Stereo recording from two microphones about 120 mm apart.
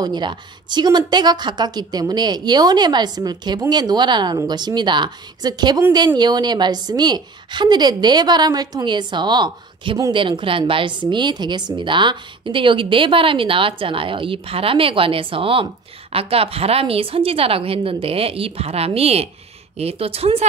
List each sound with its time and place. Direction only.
0.0 s a woman's voice: 40° right (ahead or behind)
10.1 s a woman's voice: 45° right (ahead or behind)